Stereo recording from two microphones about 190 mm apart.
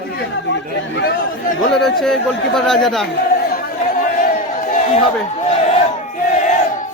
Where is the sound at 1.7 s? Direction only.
Centre (ahead or behind).